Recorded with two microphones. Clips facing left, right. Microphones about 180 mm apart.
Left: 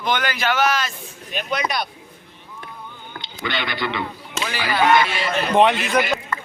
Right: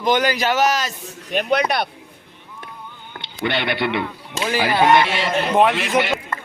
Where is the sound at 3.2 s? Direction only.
60° right (ahead or behind).